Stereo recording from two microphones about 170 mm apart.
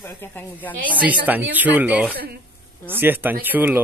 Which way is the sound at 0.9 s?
10° right (ahead or behind).